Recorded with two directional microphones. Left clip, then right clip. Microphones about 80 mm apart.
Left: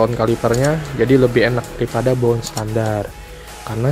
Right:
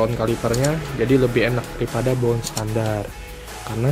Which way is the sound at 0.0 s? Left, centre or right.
Left.